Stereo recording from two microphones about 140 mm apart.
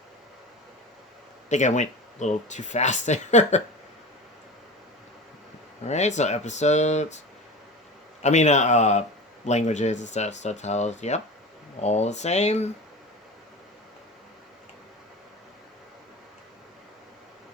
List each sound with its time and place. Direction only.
1.5 s speech: 60° left (ahead or behind)
5.8 s speech: 55° left (ahead or behind)
8.2 s speech: 55° left (ahead or behind)